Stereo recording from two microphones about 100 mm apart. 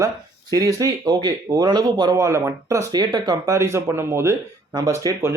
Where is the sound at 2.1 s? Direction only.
30° right (ahead or behind).